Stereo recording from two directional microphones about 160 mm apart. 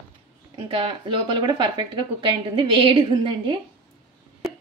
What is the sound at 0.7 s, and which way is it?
A woman's voice, 35° right (ahead or behind).